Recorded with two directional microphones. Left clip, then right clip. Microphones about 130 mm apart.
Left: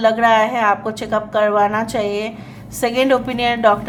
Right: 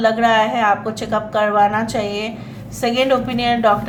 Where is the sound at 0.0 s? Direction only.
30° left (ahead or behind).